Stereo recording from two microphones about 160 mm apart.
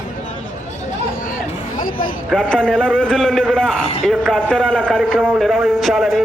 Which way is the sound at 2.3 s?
5° left (ahead or behind).